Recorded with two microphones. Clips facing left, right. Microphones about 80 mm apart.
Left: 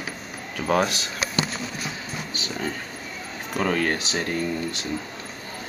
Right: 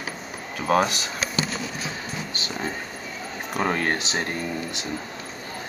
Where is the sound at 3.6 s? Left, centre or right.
Right.